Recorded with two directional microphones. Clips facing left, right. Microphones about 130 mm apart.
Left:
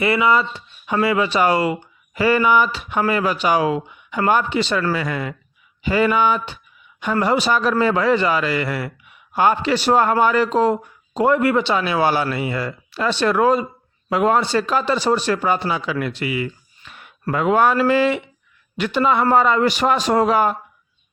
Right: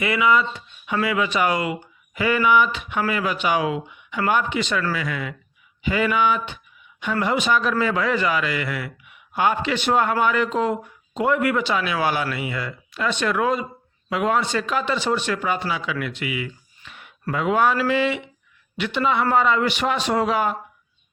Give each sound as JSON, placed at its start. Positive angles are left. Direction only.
{"t": 0.0, "sound": "a man's voice", "side_deg": 35}